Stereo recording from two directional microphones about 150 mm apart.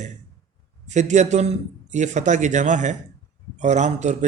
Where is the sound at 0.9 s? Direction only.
50° right (ahead or behind).